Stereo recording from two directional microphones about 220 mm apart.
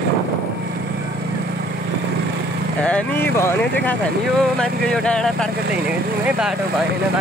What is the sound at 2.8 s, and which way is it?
Speech, 10° left (ahead or behind).